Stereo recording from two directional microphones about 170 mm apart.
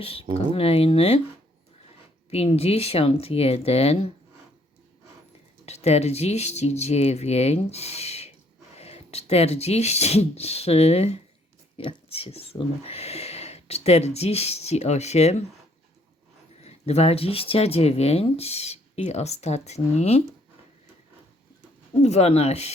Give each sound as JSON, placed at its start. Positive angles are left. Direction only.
{"t": 0.0, "sound": "speech", "side_deg": 35}
{"t": 2.3, "sound": "speech", "side_deg": 35}
{"t": 5.6, "sound": "speech", "side_deg": 40}
{"t": 16.6, "sound": "speech", "side_deg": 40}
{"t": 22.0, "sound": "speech", "side_deg": 40}